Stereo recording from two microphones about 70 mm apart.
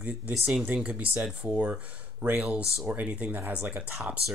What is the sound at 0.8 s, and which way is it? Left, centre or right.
Speech, right.